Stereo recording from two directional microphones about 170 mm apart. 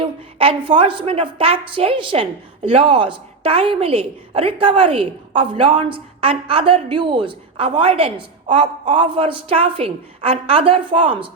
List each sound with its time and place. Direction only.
0.0 s a man's voice: 30° right (ahead or behind)